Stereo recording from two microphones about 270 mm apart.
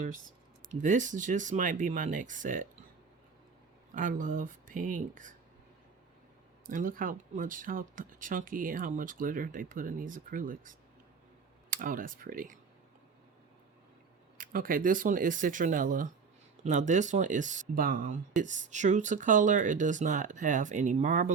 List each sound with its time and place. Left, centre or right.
0.7 s speech: right
3.9 s speech: right
6.7 s speech: right
14.3 s speech: right